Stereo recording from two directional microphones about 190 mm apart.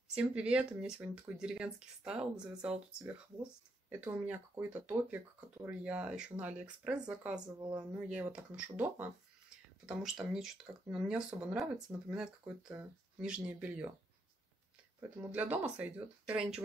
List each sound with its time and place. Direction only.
0.1 s speech: 5° right (ahead or behind)
4.0 s speech: 10° right (ahead or behind)
7.6 s speech: 20° right (ahead or behind)
8.1 s speech: 5° right (ahead or behind)
15.0 s speech: 10° right (ahead or behind)